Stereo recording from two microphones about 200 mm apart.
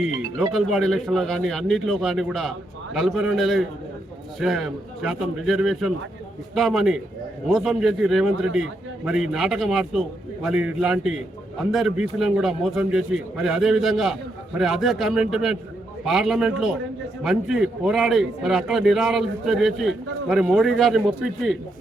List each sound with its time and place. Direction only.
0.5 s a man's voice: centre (ahead or behind)